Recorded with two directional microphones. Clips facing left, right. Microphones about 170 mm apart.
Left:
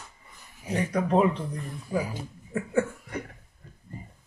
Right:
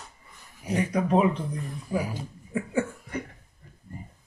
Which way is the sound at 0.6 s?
15° right (ahead or behind).